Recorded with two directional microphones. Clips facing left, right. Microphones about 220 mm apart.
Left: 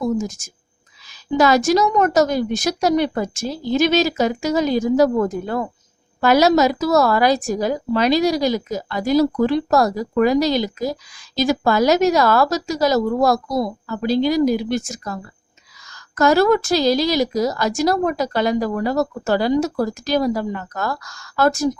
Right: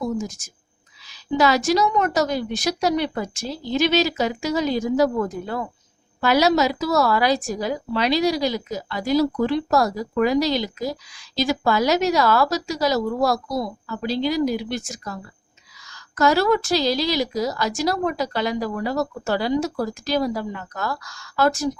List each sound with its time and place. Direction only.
0.3 s a woman's voice: 45° left (ahead or behind)